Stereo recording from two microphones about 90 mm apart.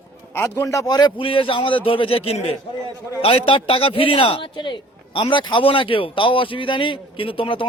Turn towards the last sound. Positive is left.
turn(degrees=75)  # may be behind; listen again after turning